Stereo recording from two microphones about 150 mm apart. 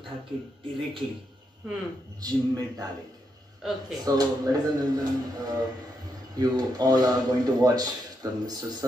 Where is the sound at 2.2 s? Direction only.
25° right (ahead or behind).